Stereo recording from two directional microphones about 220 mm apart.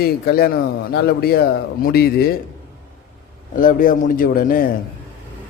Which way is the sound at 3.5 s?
40° left (ahead or behind).